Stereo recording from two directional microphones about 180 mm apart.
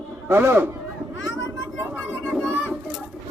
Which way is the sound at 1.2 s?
90° left.